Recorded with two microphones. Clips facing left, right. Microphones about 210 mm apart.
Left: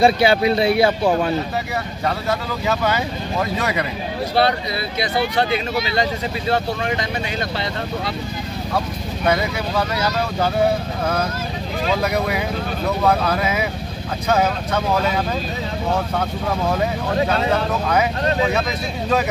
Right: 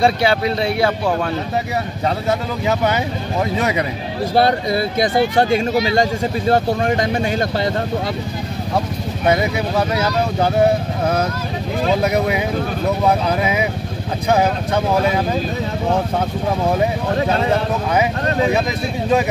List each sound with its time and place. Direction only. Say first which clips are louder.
0.0 s speech: left 1 dB; 10° left (ahead or behind)
4.4 s speech: right 4 dB; 45° right (ahead or behind)
9.3 s speech: right 3 dB; 20° right (ahead or behind)
13.0 s speech: even; 15° right (ahead or behind)